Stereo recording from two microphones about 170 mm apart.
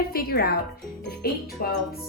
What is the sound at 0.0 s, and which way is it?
Speech, 60° left (ahead or behind).